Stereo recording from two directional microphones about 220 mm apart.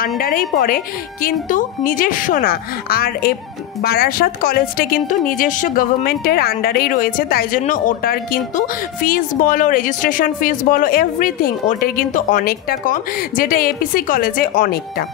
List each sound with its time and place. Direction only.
0.2 s a woman's voice: 40° left (ahead or behind)